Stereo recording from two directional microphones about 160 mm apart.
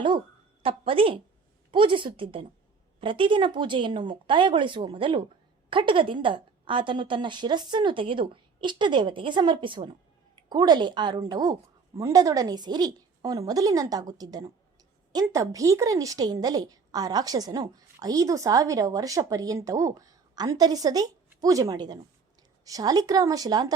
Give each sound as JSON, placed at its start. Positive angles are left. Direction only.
{"t": 0.6, "sound": "a woman's voice", "side_deg": -35}